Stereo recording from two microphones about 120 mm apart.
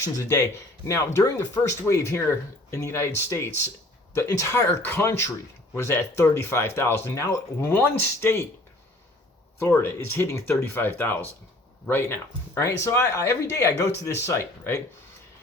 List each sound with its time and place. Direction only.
0.0 s speech: 25° left (ahead or behind)
9.6 s speech: 20° left (ahead or behind)